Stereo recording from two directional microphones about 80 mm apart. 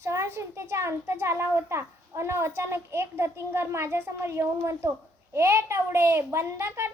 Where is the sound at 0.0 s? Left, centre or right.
Right.